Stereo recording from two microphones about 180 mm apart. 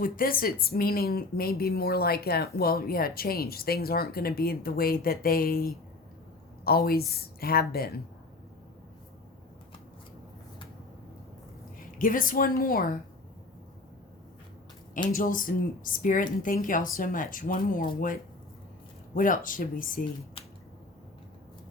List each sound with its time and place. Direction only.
0.0 s speech: 50° left (ahead or behind)
11.8 s a woman's voice: 50° left (ahead or behind)
15.1 s a woman's voice: 50° left (ahead or behind)
19.1 s a woman's voice: 50° left (ahead or behind)